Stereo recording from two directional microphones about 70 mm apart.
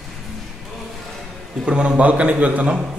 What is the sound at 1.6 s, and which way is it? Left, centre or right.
A man's voice, centre.